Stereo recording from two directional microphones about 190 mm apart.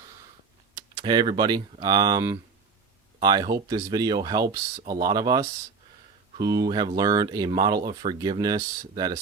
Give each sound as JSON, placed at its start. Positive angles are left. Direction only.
{"t": 0.8, "sound": "speech", "side_deg": -20}